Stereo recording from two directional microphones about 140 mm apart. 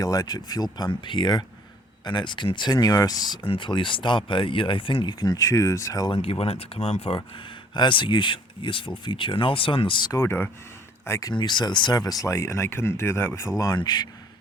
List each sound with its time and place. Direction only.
0.0 s speech: 25° left (ahead or behind)
6.1 s speech: 45° left (ahead or behind)
7.2 s speech: 35° left (ahead or behind)
10.1 s speech: 20° left (ahead or behind)
13.6 s speech: 30° left (ahead or behind)